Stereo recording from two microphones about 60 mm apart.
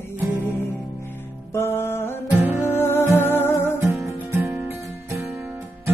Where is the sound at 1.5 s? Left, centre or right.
Left.